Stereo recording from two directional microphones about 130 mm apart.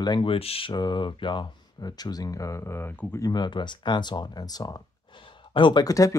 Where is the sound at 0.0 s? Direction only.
40° left (ahead or behind).